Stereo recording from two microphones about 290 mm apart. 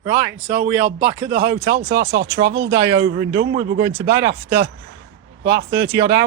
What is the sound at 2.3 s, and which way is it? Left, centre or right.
Speech, right.